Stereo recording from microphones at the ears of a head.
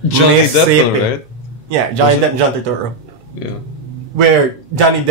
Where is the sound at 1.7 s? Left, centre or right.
Right.